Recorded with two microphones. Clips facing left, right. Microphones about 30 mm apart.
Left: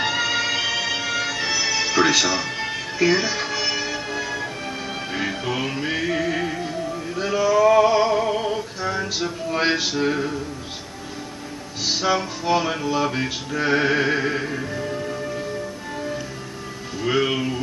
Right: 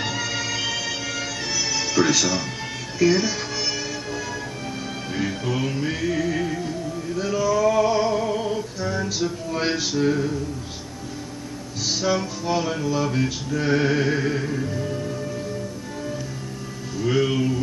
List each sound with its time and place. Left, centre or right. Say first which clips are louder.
0.0 s music: left 5 dB; left
11.8 s music: left 2 dB; left
17.0 s speech: even; left